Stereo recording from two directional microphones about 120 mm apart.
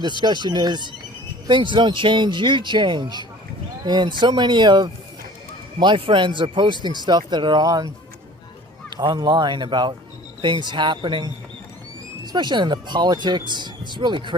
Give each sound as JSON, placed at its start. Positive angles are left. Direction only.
{"t": 0.2, "sound": "speech", "side_deg": -40}
{"t": 9.0, "sound": "speech", "side_deg": -40}